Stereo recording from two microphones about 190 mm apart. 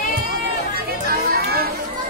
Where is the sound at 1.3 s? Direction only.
55° right (ahead or behind).